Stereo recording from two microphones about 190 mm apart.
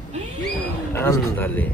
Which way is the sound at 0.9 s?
15° left (ahead or behind).